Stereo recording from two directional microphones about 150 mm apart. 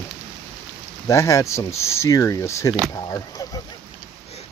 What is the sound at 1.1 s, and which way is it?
Speech, 20° left (ahead or behind).